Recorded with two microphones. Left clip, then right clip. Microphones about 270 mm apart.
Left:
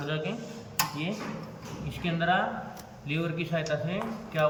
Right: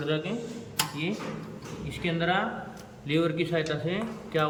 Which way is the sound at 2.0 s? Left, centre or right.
Centre.